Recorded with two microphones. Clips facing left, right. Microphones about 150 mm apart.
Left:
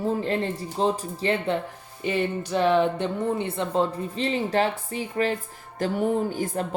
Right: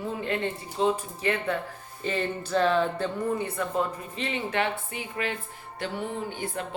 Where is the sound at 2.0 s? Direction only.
15° left (ahead or behind).